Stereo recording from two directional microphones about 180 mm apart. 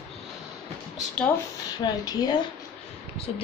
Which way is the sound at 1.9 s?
25° left (ahead or behind).